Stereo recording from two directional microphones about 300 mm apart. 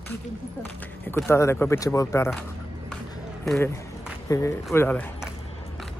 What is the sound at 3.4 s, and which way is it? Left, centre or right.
Speech, centre.